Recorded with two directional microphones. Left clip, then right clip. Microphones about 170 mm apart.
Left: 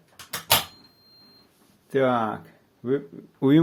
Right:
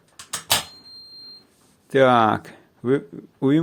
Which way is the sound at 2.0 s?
65° right (ahead or behind).